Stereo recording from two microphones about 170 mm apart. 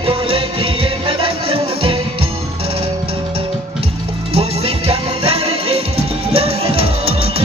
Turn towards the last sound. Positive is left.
turn(degrees=-35)  # may be behind; listen again after turning